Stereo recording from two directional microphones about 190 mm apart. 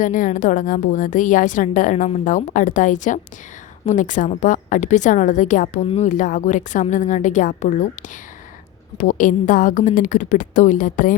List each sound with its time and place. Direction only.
0.0 s a woman's voice: 45° left (ahead or behind)
9.0 s a woman's voice: 45° left (ahead or behind)